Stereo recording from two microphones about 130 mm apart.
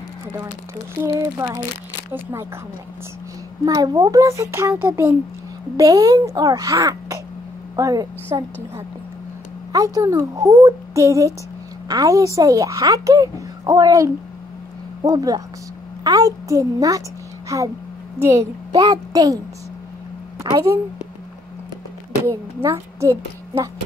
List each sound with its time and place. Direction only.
1.0 s a woman's voice: 25° right (ahead or behind)
3.6 s a woman's voice: 30° right (ahead or behind)
5.8 s a woman's voice: 25° right (ahead or behind)
9.7 s a woman's voice: 25° right (ahead or behind)
22.2 s speech: 20° right (ahead or behind)